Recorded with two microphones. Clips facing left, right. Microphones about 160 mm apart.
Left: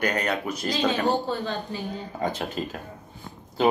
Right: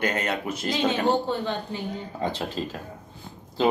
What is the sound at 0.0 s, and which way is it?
Speech, 25° right (ahead or behind).